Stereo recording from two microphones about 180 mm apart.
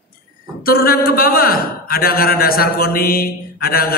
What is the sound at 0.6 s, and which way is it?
A man's voice, 55° left (ahead or behind).